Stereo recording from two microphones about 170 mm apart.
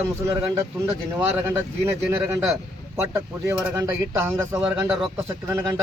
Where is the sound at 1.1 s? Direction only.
15° right (ahead or behind).